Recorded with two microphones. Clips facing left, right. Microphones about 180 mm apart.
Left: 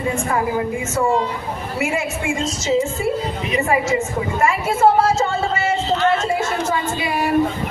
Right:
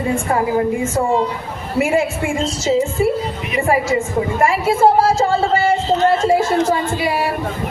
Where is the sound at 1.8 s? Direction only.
30° right (ahead or behind).